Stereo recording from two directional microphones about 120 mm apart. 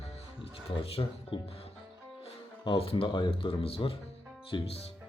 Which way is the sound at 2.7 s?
45° left (ahead or behind).